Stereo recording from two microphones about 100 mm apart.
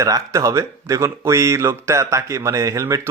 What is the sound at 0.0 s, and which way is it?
Speech, 35° right (ahead or behind).